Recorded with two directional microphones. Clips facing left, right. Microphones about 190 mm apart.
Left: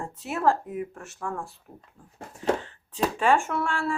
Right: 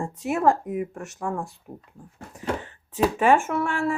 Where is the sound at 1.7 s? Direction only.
50° right (ahead or behind).